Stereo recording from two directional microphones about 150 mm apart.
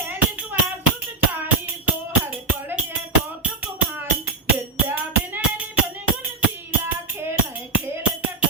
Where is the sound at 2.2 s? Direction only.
15° right (ahead or behind).